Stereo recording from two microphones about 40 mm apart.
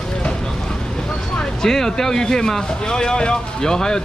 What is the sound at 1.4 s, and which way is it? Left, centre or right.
Speech, centre.